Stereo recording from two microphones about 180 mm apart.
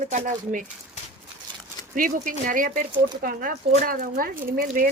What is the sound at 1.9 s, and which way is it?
Speech, 50° right (ahead or behind).